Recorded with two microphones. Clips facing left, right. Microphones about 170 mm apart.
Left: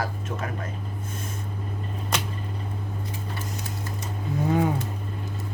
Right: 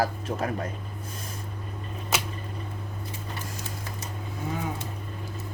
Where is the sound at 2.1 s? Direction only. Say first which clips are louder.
Even; 5° right (ahead or behind).